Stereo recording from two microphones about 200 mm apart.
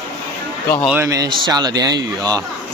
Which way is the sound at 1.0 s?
20° right (ahead or behind).